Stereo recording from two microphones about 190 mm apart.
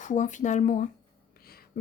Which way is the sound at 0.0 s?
40° left (ahead or behind).